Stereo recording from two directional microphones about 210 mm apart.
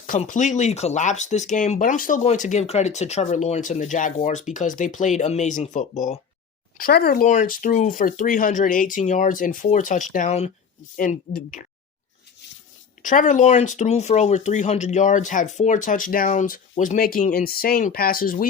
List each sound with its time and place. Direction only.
0.1 s speech: 35° left (ahead or behind)
13.0 s speech: 35° left (ahead or behind)